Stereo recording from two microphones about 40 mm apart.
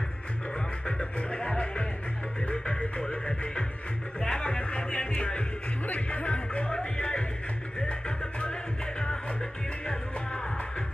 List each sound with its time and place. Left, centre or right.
0.8 s speech: left
5.9 s music: left
6.7 s speech: left